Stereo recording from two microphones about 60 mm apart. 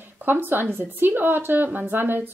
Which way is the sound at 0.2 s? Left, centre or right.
Right.